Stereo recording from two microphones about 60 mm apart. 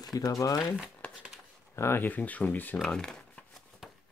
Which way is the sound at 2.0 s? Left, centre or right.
Left.